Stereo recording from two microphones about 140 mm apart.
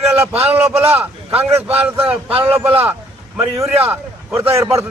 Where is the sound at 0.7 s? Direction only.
45° right (ahead or behind).